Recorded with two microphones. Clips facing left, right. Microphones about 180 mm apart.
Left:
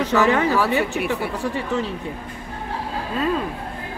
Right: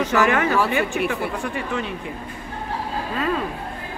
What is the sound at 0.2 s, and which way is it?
Speech, 20° left (ahead or behind).